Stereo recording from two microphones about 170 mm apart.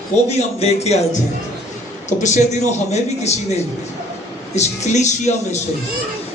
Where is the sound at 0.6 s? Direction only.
40° left (ahead or behind).